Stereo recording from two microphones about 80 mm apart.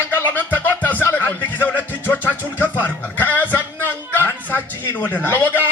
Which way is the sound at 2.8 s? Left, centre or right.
Left.